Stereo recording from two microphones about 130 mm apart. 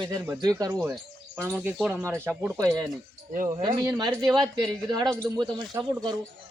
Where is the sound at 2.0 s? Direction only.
20° right (ahead or behind).